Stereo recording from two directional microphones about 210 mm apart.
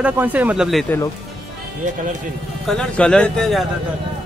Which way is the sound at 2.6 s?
5° left (ahead or behind).